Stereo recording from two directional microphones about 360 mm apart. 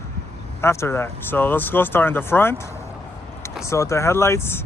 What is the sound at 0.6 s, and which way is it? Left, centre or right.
Speech, centre.